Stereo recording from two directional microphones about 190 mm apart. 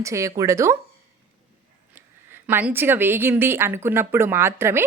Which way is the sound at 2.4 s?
10° right (ahead or behind).